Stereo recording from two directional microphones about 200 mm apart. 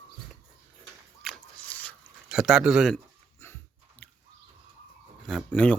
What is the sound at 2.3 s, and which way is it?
Speech, 5° right (ahead or behind).